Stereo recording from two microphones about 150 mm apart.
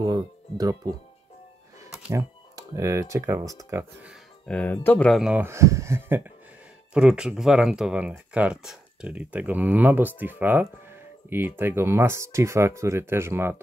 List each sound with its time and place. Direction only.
0.0 s music: 25° right (ahead or behind)
2.1 s speech: 20° right (ahead or behind)
4.5 s speech: 10° left (ahead or behind); by 13.6 s 15° right (ahead or behind)